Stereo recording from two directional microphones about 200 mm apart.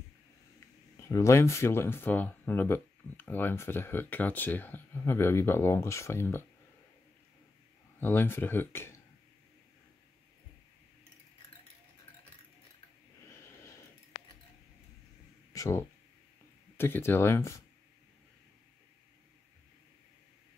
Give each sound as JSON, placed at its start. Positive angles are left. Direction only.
{"t": 0.9, "sound": "speech", "side_deg": 15}
{"t": 8.0, "sound": "speech", "side_deg": 10}
{"t": 15.5, "sound": "a sound", "side_deg": 15}
{"t": 16.7, "sound": "speech", "side_deg": 10}